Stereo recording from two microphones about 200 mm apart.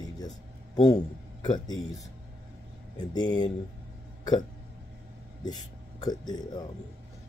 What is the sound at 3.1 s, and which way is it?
Speech, 20° left (ahead or behind).